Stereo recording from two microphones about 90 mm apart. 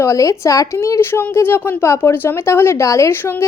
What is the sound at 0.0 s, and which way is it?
A woman's voice, 35° left (ahead or behind).